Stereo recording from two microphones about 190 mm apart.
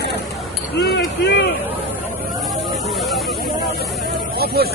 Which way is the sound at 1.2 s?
65° left (ahead or behind).